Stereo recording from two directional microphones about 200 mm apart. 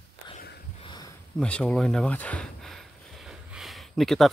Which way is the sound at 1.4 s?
5° left (ahead or behind).